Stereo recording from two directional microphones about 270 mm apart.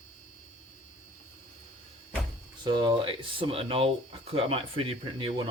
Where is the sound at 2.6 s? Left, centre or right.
Centre.